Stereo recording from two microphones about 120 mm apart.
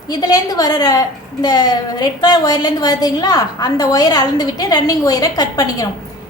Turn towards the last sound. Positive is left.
turn(degrees=30)  # may be behind; listen again after turning